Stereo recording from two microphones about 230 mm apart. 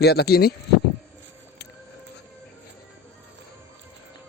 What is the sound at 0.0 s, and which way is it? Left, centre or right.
Speech, left.